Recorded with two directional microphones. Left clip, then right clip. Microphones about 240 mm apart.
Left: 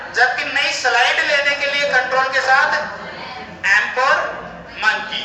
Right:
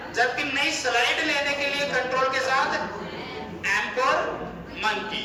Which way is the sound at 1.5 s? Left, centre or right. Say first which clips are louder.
Left 8 dB; centre.